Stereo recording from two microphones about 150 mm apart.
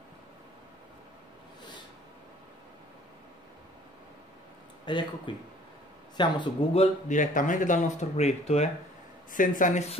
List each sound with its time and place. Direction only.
4.8 s speech: 30° left (ahead or behind)
6.7 s speech: 50° left (ahead or behind)
9.3 s speech: 60° left (ahead or behind)